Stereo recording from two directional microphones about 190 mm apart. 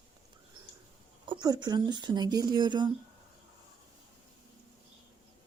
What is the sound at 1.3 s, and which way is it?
Speech, 20° right (ahead or behind).